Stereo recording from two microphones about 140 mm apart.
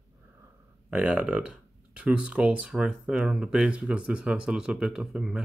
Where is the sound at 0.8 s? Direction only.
10° right (ahead or behind).